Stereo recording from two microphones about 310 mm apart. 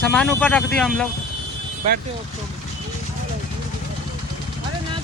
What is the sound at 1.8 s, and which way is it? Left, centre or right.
Speech, right.